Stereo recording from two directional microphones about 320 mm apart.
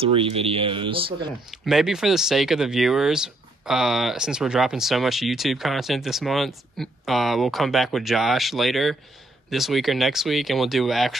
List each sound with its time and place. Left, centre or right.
0.0 s speech: centre
1.5 s speech: centre